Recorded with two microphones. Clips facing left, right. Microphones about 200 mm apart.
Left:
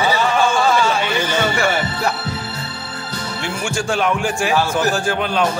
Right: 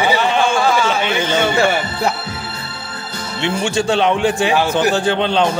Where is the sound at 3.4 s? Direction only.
25° right (ahead or behind).